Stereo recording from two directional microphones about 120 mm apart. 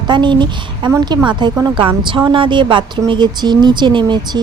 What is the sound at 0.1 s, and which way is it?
Speech, 40° right (ahead or behind).